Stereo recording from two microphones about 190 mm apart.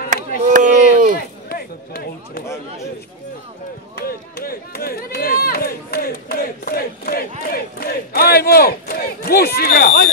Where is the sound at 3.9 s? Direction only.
50° left (ahead or behind).